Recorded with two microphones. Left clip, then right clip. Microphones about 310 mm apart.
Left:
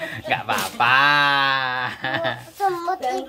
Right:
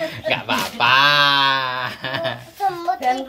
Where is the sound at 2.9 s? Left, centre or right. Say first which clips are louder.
Right 3 dB; left.